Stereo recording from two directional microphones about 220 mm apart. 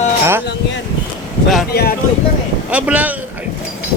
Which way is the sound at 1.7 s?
45° left (ahead or behind).